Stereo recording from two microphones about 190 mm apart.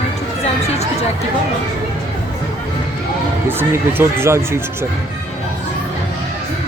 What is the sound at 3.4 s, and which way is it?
Speech, 10° right (ahead or behind).